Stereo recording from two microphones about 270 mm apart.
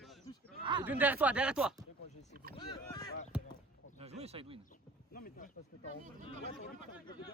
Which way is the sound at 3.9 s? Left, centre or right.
Right.